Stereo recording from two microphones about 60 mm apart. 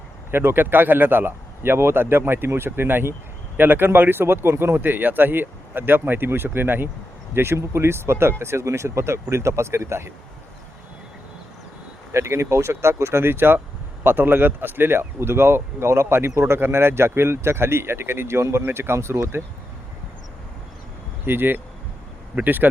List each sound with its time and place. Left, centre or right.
0.3 s speech: right
7.3 s speech: right
12.1 s speech: right
16.6 s speech: right
21.2 s speech: right